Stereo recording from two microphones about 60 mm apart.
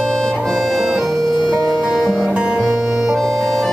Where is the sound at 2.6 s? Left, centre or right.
Centre.